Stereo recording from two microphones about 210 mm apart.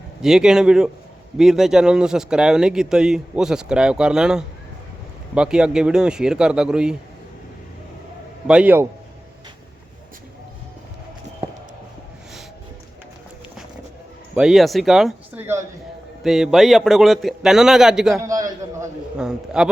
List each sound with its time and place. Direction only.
0.2 s speech: centre (ahead or behind)
8.4 s a man's voice: 5° right (ahead or behind)
11.4 s a sound: 25° right (ahead or behind)
14.3 s speech: centre (ahead or behind)
18.2 s a sound: 15° right (ahead or behind)
19.1 s speech: 5° right (ahead or behind)